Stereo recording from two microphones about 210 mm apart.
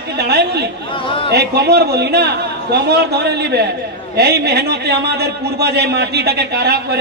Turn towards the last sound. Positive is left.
turn(degrees=-50)  # may be behind; listen again after turning